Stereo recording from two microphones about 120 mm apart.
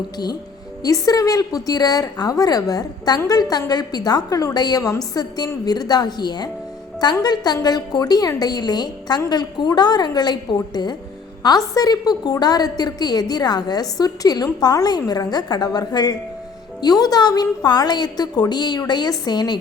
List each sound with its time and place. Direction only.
0.8 s a woman's voice: 30° left (ahead or behind)